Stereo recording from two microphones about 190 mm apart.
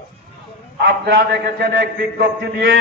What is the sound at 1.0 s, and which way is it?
A man's voice, 60° right (ahead or behind).